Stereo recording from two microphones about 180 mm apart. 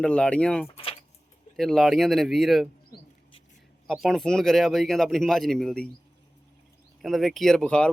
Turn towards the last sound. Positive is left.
turn(degrees=5)  # may be behind; listen again after turning